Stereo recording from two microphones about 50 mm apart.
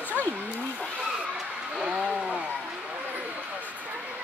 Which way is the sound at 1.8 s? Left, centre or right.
Centre.